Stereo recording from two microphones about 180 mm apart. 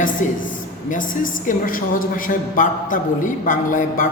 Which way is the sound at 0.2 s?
45° left (ahead or behind).